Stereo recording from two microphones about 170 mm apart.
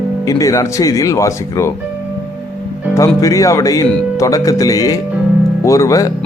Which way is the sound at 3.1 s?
20° left (ahead or behind).